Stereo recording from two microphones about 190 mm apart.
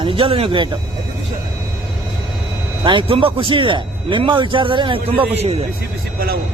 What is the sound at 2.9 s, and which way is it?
A man's voice, 25° right (ahead or behind).